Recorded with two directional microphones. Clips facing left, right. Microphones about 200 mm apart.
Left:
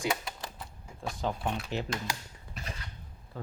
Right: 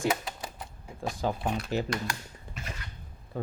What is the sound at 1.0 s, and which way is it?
Speech, 5° right (ahead or behind).